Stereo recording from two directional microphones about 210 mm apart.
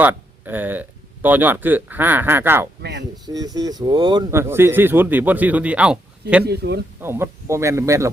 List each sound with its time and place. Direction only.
0.0 s speech: 10° right (ahead or behind)
6.4 s speech: 50° right (ahead or behind)
7.0 s speech: 10° right (ahead or behind)